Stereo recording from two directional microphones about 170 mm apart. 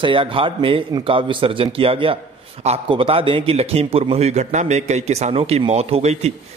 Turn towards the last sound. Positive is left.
turn(degrees=-35)  # may be behind; listen again after turning